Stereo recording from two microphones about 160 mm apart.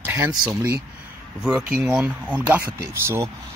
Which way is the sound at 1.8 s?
10° right (ahead or behind).